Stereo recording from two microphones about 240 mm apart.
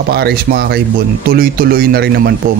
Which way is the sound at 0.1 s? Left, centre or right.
Right.